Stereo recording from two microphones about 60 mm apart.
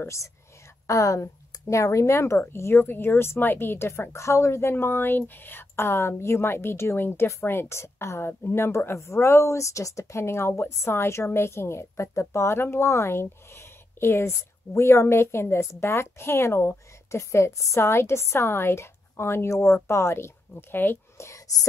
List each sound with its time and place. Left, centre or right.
0.0 s a woman's voice: left
0.8 s a woman's voice: left